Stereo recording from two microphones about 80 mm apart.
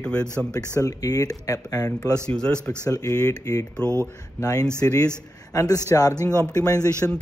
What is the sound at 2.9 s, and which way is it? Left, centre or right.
Speech, left.